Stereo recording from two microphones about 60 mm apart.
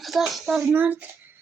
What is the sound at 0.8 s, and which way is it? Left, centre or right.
Speech, right.